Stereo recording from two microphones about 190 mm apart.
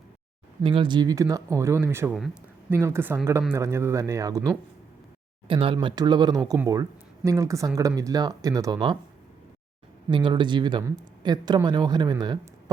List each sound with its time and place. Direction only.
0.6 s speech: 25° right (ahead or behind)
2.1 s a sound: 5° right (ahead or behind)
2.7 s speech: 15° right (ahead or behind)
5.5 s speech: 30° right (ahead or behind)
10.1 s speech: 25° right (ahead or behind)